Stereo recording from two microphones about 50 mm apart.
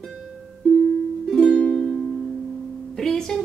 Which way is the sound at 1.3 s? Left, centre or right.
Centre.